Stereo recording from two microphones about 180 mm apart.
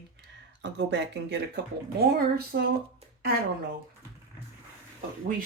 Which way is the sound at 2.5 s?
65° right (ahead or behind).